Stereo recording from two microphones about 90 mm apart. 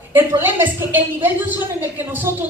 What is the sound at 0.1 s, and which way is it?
A man's voice, 20° right (ahead or behind).